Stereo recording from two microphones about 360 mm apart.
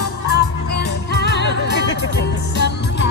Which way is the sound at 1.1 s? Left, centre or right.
Left.